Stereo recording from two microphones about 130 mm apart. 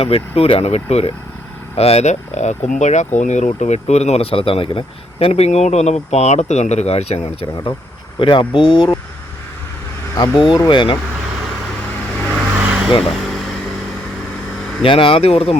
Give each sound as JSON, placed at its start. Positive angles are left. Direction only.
{"t": 0.0, "sound": "speech", "side_deg": 50}
{"t": 7.5, "sound": "speech", "side_deg": 35}
{"t": 10.3, "sound": "speech", "side_deg": 40}
{"t": 12.3, "sound": "vehicle", "side_deg": -15}
{"t": 13.1, "sound": "air conditioning", "side_deg": 0}
{"t": 14.8, "sound": "speech", "side_deg": 40}